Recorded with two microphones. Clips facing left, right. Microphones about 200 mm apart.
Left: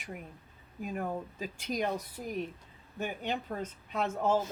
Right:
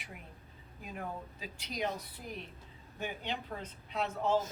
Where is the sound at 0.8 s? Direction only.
45° left (ahead or behind).